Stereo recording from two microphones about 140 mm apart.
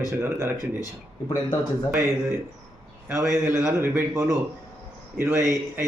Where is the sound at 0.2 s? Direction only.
15° right (ahead or behind).